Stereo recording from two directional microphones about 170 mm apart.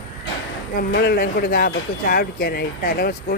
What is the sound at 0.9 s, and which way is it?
Speech, 70° left (ahead or behind).